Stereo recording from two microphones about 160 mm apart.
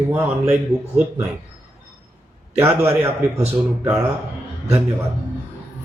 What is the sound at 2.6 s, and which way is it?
Speech, 15° right (ahead or behind).